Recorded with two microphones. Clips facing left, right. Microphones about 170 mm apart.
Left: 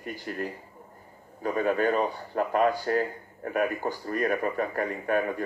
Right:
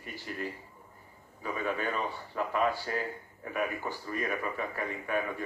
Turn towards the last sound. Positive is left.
turn(degrees=50)  # may be behind; listen again after turning